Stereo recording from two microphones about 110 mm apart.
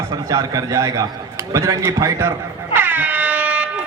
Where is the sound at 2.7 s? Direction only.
20° right (ahead or behind).